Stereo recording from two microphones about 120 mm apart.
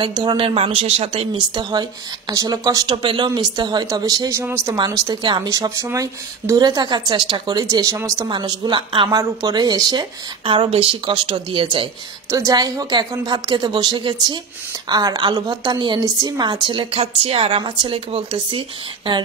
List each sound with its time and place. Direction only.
0.0 s a woman's voice: 40° right (ahead or behind)
0.6 s a woman's voice: 55° right (ahead or behind); by 4.4 s 30° right (ahead or behind)
4.4 s speech: 20° right (ahead or behind)
4.7 s a woman's voice: 35° right (ahead or behind)
5.5 s a woman's voice: 25° right (ahead or behind)
7.7 s speech: 25° right (ahead or behind)
8.3 s a woman's voice: 40° right (ahead or behind)
12.3 s a woman's voice: 25° right (ahead or behind)
16.6 s speech: 45° right (ahead or behind)